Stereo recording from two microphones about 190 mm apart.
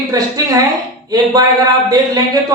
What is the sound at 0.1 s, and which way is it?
A man's voice, 20° right (ahead or behind).